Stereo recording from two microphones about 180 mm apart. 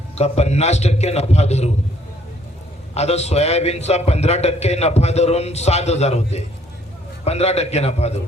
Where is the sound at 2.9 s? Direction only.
35° left (ahead or behind).